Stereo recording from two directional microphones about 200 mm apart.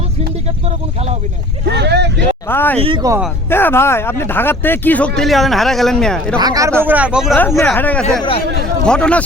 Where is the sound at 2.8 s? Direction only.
20° right (ahead or behind).